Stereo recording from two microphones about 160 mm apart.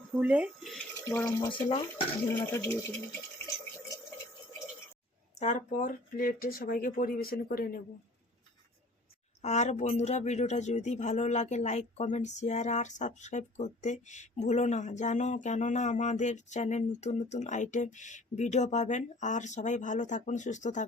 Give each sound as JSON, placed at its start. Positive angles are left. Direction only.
{"t": 0.2, "sound": "speech", "side_deg": -10}
{"t": 1.4, "sound": "speech", "side_deg": 10}
{"t": 2.5, "sound": "water", "side_deg": 15}
{"t": 5.3, "sound": "speech", "side_deg": 45}
{"t": 9.4, "sound": "speech", "side_deg": 45}